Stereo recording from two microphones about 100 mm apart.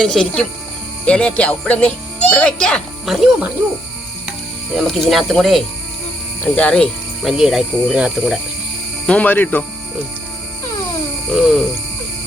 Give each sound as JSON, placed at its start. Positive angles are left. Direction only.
{"t": 0.0, "sound": "speech", "side_deg": 5}
{"t": 4.3, "sound": "speech", "side_deg": 0}
{"t": 6.4, "sound": "speech", "side_deg": 15}
{"t": 7.3, "sound": "speech", "side_deg": -5}
{"t": 9.0, "sound": "speech", "side_deg": 15}
{"t": 11.3, "sound": "speech", "side_deg": -5}